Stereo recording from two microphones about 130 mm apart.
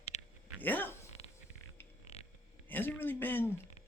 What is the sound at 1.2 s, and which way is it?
Music, 50° left (ahead or behind).